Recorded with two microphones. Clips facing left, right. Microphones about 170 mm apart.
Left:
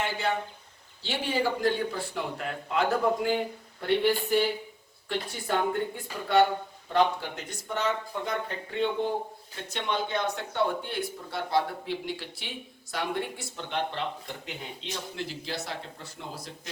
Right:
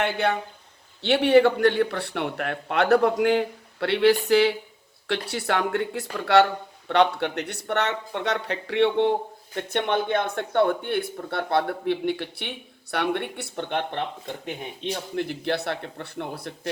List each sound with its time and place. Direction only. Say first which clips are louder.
0.0 s speech: right 5 dB; 65° right (ahead or behind)
9.6 s speech: right 7 dB; 60° right (ahead or behind)
15.1 s speech: right 11 dB; 55° right (ahead or behind)